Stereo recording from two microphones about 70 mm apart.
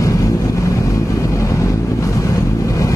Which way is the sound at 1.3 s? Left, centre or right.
Left.